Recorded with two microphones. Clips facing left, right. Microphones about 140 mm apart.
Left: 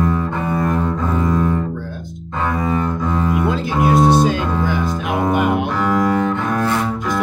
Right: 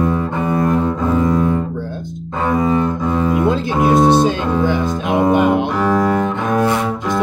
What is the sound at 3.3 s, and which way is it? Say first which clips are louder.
Music: right 3 dB; 25° right (ahead or behind).